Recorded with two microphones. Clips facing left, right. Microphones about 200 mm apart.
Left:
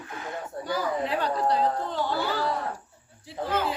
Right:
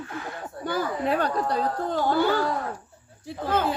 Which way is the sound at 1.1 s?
50° right (ahead or behind).